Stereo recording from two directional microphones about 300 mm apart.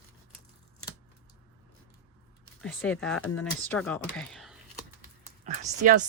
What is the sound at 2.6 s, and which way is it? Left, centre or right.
Speech, centre.